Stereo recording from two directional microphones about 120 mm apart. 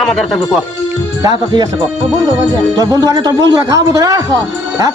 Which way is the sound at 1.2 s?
40° right (ahead or behind).